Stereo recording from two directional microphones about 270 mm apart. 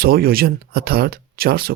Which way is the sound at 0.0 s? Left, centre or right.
Right.